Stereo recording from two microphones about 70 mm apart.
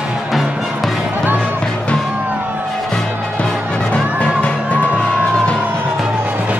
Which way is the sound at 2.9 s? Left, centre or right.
Centre.